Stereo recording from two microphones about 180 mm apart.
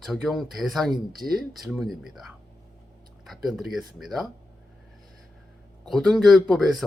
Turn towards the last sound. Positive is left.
turn(degrees=0)  # may be behind; listen again after turning